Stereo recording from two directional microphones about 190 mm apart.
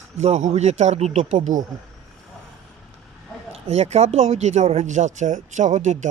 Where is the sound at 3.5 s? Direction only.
35° right (ahead or behind).